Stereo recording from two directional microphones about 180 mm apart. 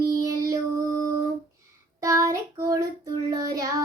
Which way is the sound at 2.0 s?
15° right (ahead or behind).